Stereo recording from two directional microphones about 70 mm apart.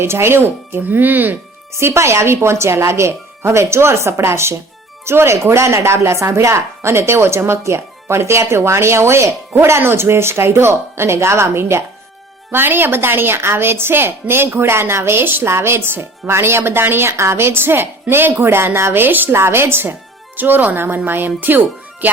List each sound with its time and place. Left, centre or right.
0.0 s speech: right
1.7 s speech: right